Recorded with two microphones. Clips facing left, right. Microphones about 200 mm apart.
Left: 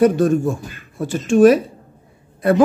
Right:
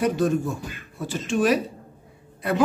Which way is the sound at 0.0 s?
50° left (ahead or behind).